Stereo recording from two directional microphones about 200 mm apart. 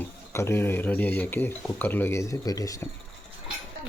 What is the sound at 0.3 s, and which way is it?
Speech, 10° left (ahead or behind).